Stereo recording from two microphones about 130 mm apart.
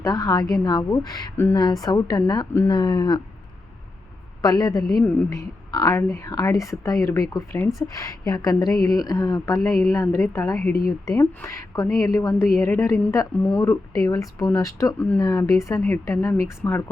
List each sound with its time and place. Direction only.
0.0 s a woman's voice: 30° left (ahead or behind)
4.4 s a woman's voice: 30° left (ahead or behind)